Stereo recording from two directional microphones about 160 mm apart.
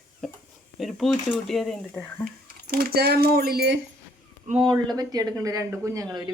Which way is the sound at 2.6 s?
70° right (ahead or behind).